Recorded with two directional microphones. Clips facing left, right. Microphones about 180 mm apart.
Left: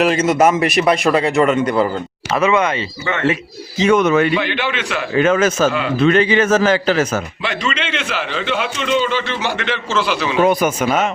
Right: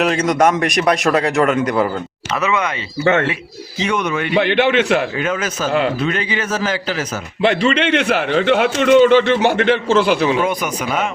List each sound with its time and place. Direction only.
0.0 s a man's voice: 5° left (ahead or behind)
2.4 s speech: 30° left (ahead or behind)
3.0 s a man's voice: 60° right (ahead or behind)
3.8 s a man's voice: 45° left (ahead or behind)
4.4 s a man's voice: 60° right (ahead or behind)
5.1 s a man's voice: 50° left (ahead or behind)
7.7 s a man's voice: 60° right (ahead or behind)
10.4 s a man's voice: 45° left (ahead or behind)